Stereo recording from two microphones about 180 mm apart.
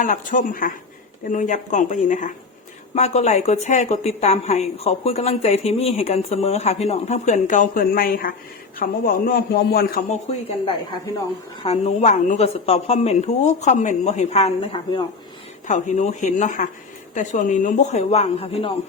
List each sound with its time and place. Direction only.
0.0 s a man's voice: 45° left (ahead or behind)
11.6 s a woman's voice: 35° left (ahead or behind)